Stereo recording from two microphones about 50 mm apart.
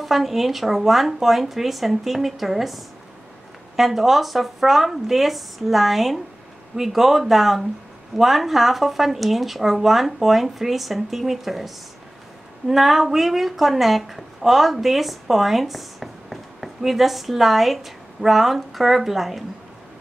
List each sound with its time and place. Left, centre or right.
0.0 s speech: centre